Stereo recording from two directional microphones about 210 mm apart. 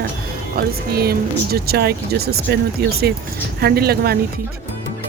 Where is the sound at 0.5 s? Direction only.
45° right (ahead or behind).